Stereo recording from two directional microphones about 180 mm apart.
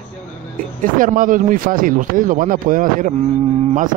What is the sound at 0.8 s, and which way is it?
Speech, 50° right (ahead or behind).